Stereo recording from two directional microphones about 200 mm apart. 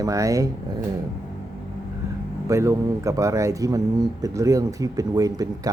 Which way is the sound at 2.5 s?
15° right (ahead or behind).